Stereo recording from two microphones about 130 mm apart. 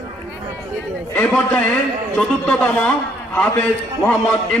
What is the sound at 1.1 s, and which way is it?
A man's voice, 10° left (ahead or behind).